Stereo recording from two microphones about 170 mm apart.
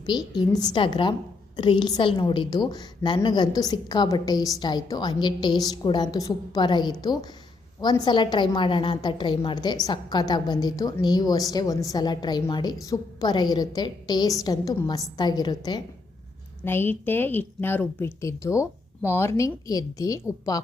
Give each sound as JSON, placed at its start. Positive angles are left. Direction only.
{"t": 0.3, "sound": "a woman's voice", "side_deg": 25}
{"t": 16.6, "sound": "a woman's voice", "side_deg": 15}